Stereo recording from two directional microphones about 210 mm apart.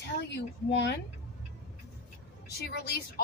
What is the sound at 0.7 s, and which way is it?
Speech, 55° left (ahead or behind).